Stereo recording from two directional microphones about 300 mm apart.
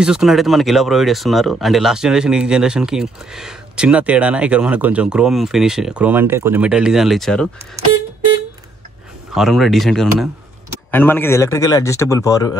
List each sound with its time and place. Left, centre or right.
0.0 s speech: centre
9.3 s a man's voice: centre